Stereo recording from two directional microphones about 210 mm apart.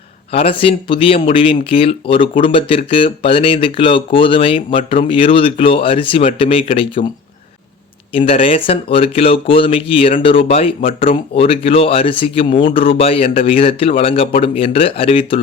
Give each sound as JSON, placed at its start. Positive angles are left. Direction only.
{"t": 0.3, "sound": "speech", "side_deg": 25}
{"t": 8.1, "sound": "speech", "side_deg": 25}